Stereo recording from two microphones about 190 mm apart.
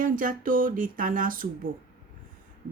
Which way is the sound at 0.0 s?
45° right (ahead or behind).